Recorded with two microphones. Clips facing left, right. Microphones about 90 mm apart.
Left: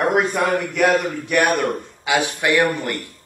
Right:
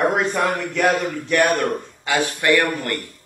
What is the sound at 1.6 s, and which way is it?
Speech, 15° left (ahead or behind).